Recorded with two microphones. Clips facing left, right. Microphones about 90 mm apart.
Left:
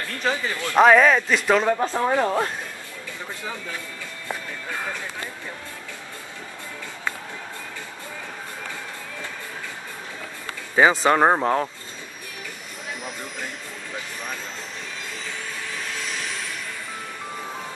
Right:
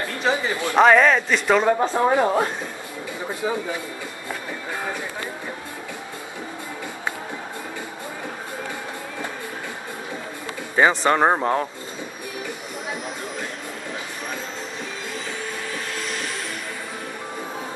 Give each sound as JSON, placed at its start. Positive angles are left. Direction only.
{"t": 0.0, "sound": "speech", "side_deg": -15}
{"t": 0.7, "sound": "a man's voice", "side_deg": 0}
{"t": 1.7, "sound": "speech", "side_deg": -10}
{"t": 4.6, "sound": "a sound", "side_deg": -15}
{"t": 10.8, "sound": "a man's voice", "side_deg": 5}
{"t": 15.7, "sound": "vehicle", "side_deg": 0}